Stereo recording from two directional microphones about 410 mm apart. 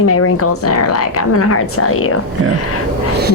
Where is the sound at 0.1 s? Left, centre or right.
Left.